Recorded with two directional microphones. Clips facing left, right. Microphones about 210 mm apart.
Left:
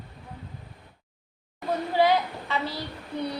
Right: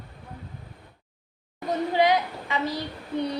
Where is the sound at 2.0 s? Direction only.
15° right (ahead or behind).